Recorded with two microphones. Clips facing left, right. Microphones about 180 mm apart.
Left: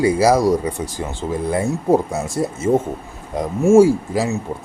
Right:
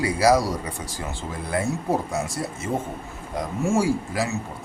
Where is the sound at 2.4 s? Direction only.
30° left (ahead or behind).